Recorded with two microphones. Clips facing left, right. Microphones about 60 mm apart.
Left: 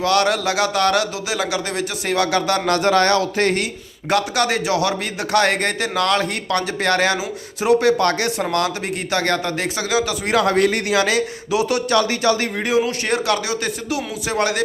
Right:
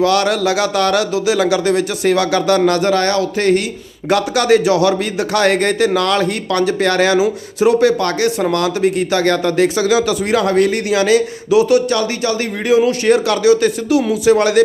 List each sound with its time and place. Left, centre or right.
0.0 s a man's voice: left
2.2 s a man's voice: left
2.6 s speech: left
4.1 s a man's voice: left
10.6 s a man's voice: left
13.1 s a man's voice: left